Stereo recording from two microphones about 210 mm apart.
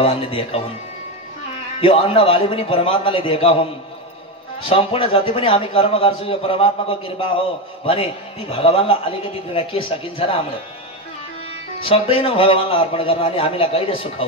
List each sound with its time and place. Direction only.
0.0 s a man's voice: 25° left (ahead or behind)
1.8 s a man's voice: 25° left (ahead or behind)
4.6 s a man's voice: 25° left (ahead or behind)
11.8 s a man's voice: 25° left (ahead or behind)